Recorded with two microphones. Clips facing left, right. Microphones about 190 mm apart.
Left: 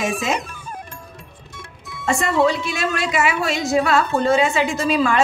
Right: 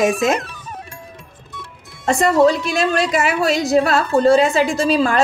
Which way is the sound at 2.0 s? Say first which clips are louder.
Right 4 dB; 40° right (ahead or behind).